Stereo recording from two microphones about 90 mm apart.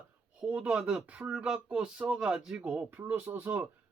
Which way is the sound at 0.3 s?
15° right (ahead or behind).